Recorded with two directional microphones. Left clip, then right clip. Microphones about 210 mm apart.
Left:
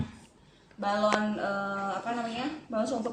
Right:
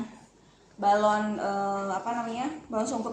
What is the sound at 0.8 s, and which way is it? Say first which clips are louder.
Speech: right 4 dB; 30° left (ahead or behind).